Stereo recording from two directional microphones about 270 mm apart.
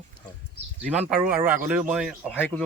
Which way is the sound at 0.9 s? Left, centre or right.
Centre.